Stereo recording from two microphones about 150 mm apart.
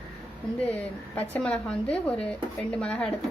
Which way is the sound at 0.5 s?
10° left (ahead or behind).